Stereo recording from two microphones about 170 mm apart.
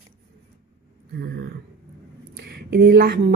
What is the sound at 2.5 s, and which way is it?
Speech, 70° right (ahead or behind).